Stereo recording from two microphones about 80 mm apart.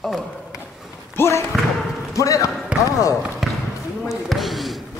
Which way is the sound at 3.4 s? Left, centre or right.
Centre.